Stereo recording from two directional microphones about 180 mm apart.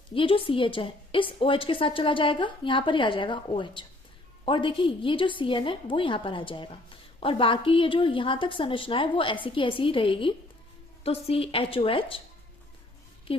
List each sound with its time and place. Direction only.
0.1 s a woman's voice: 30° left (ahead or behind)